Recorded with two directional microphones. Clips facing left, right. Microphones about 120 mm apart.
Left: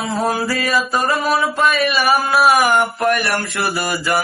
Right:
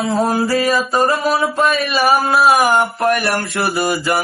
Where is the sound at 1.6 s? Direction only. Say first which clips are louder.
Right 1 dB; 35° right (ahead or behind).